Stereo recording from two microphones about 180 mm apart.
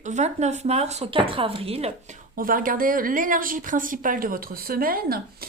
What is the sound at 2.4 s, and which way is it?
Speech, 50° right (ahead or behind).